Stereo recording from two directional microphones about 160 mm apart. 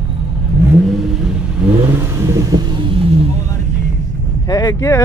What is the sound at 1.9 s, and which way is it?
Vehicle, 20° right (ahead or behind).